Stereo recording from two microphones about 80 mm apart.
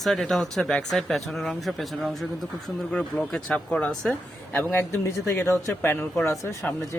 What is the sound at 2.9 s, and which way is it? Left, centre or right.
Speech, centre.